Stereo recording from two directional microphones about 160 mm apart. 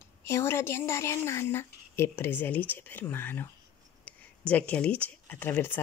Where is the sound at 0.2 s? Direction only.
15° left (ahead or behind).